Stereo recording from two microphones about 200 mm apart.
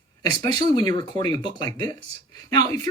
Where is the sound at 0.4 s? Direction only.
20° left (ahead or behind).